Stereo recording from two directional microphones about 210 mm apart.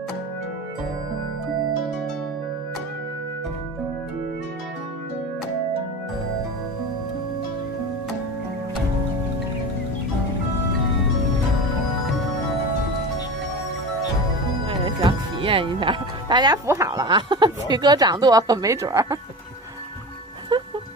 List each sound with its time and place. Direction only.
14.7 s speech: 25° right (ahead or behind)